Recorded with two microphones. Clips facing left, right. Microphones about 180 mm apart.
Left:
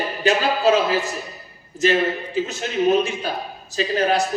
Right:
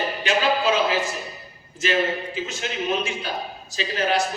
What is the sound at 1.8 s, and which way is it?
A man's voice, 40° left (ahead or behind).